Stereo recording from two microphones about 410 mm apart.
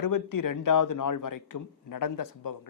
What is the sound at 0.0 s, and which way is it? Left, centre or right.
Speech, left.